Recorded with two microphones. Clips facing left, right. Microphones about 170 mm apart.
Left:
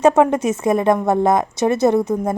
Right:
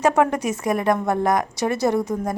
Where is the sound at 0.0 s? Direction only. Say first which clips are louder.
Left 5 dB; 25° left (ahead or behind).